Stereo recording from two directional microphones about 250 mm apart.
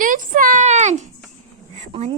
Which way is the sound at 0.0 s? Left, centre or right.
Right.